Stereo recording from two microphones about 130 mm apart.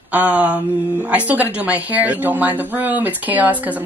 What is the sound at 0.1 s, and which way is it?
Speech, 10° right (ahead or behind).